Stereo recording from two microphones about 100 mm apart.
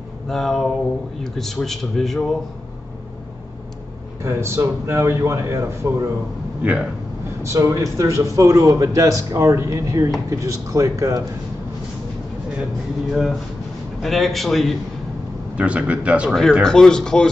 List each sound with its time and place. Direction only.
0.3 s a man's voice: centre (ahead or behind)
4.2 s a man's voice: 25° right (ahead or behind)
6.6 s speech: 10° right (ahead or behind)
7.4 s a man's voice: 30° right (ahead or behind)
13.1 s a man's voice: centre (ahead or behind)
15.5 s speech: 10° right (ahead or behind)
16.3 s a man's voice: 5° left (ahead or behind)